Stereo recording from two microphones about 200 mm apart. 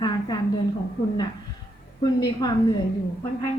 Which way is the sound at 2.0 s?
20° left (ahead or behind).